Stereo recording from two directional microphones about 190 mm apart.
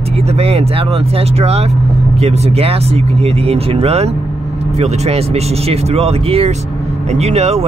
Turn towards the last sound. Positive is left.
turn(degrees=-35)  # may be behind; listen again after turning